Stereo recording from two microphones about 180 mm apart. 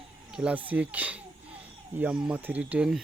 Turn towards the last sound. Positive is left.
turn(degrees=-5)  # may be behind; listen again after turning